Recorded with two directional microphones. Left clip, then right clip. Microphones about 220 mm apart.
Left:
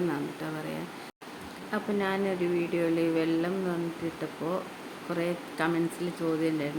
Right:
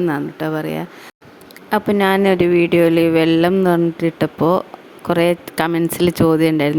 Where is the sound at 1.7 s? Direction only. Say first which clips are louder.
Right 15 dB; 45° right (ahead or behind).